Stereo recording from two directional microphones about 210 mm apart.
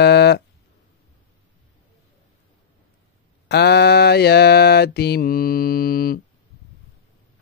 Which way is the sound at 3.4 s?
50° left (ahead or behind).